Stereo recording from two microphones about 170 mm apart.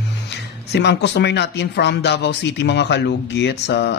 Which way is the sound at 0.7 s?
85° left.